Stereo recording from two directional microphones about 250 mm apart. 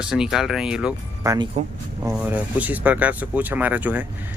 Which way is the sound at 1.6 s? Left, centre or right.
Right.